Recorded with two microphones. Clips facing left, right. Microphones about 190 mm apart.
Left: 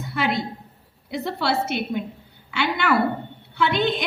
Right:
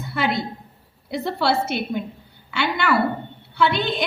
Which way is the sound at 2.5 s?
55° left (ahead or behind).